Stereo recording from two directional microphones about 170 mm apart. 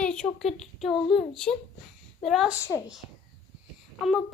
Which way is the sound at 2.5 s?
15° left (ahead or behind).